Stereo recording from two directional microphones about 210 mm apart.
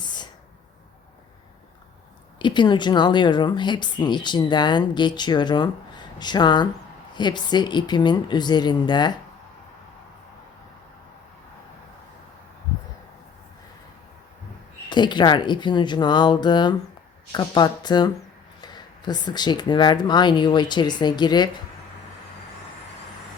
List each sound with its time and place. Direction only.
2.4 s speech: 20° left (ahead or behind)
14.8 s speech: 20° left (ahead or behind)